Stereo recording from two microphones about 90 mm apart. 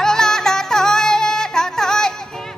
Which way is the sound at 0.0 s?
5° left (ahead or behind).